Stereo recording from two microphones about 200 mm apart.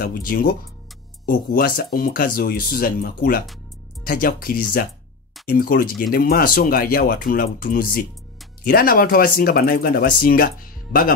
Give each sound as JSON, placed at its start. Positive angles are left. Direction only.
{"t": 0.0, "sound": "speech", "side_deg": 45}